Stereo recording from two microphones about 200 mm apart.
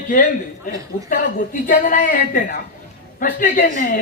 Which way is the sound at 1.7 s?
40° left (ahead or behind).